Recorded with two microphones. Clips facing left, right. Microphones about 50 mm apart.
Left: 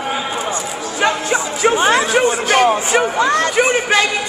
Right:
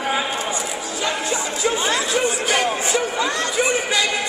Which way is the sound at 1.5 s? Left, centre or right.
Left.